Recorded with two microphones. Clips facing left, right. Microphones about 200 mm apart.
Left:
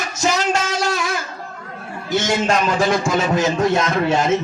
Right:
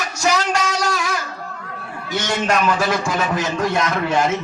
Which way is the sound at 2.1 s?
25° left (ahead or behind).